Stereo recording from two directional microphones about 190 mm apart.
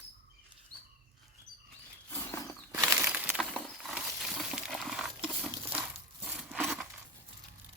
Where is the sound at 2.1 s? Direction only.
15° left (ahead or behind).